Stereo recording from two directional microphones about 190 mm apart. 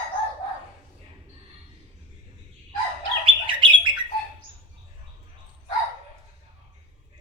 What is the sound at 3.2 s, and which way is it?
Bird, 25° right (ahead or behind).